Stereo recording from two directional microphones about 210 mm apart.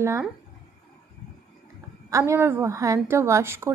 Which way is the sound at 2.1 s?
15° right (ahead or behind).